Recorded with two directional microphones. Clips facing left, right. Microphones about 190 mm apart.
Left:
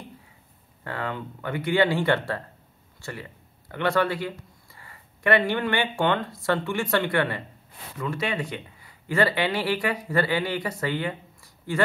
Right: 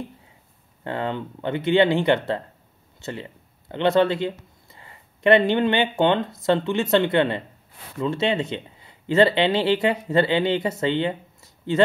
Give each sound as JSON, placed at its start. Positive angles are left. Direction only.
{"t": 0.8, "sound": "speech", "side_deg": -25}